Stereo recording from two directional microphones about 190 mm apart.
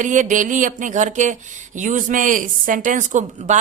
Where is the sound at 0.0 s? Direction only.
40° right (ahead or behind).